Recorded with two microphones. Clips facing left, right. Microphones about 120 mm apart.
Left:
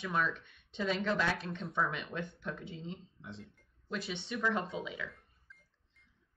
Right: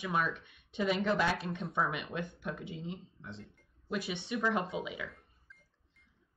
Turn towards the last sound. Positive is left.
turn(degrees=0)  # may be behind; listen again after turning